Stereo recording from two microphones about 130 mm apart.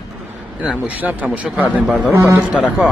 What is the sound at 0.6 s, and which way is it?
A man's voice, 10° right (ahead or behind).